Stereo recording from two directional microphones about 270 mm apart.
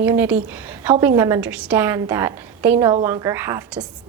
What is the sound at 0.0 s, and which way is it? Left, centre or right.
A woman's voice, centre.